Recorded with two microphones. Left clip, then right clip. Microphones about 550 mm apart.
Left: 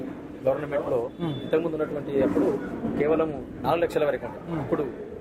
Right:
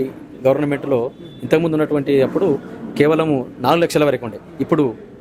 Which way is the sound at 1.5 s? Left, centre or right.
Right.